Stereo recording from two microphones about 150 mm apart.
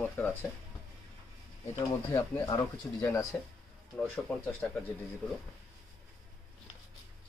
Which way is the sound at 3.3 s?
10° left (ahead or behind).